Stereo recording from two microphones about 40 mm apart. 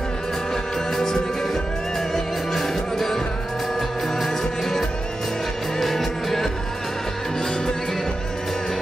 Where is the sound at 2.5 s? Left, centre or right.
Centre.